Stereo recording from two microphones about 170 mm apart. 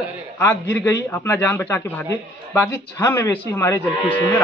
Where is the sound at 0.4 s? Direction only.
15° left (ahead or behind).